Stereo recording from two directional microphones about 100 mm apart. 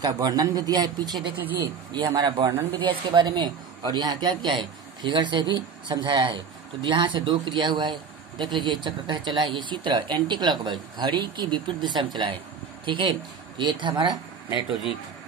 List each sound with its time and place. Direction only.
0.0 s a man's voice: 40° right (ahead or behind)